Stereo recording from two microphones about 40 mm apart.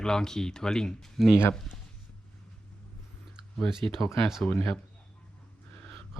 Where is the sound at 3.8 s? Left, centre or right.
Left.